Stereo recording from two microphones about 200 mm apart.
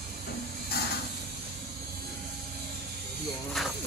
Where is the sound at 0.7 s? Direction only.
50° left (ahead or behind).